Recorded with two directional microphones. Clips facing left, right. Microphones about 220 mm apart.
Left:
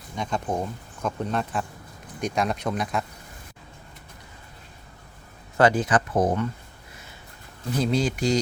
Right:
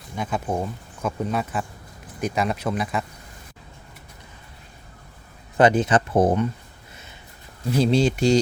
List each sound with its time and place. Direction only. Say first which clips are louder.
0.2 s speech: right 2 dB; 5° right (ahead or behind)
5.5 s speech: right 3 dB; 20° right (ahead or behind)
7.8 s speech: right 5 dB; 30° right (ahead or behind)